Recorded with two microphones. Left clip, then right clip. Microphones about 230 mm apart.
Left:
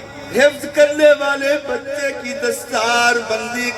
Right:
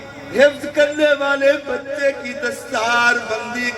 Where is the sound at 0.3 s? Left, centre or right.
Left.